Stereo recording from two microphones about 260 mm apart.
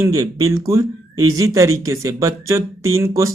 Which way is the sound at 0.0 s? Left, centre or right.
Centre.